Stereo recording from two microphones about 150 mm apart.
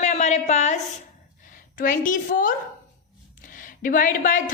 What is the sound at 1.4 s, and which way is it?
A woman's voice, 65° left (ahead or behind).